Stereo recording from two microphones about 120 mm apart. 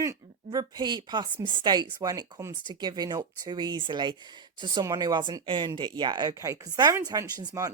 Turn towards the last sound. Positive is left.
turn(degrees=-30)  # may be behind; listen again after turning